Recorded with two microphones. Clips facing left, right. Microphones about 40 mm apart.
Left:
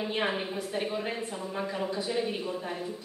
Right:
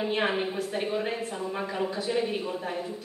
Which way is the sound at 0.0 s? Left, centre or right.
Centre.